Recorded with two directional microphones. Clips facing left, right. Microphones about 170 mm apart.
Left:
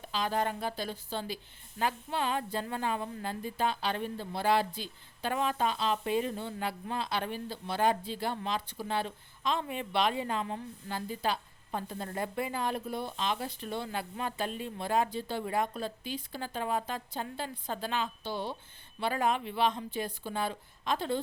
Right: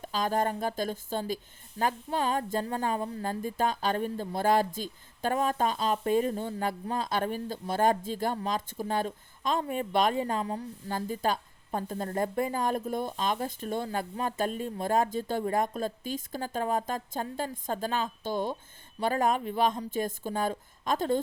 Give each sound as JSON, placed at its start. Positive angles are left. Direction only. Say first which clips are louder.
{"t": 0.0, "sound": "speech", "louder": "right 3 dB", "side_deg": -45}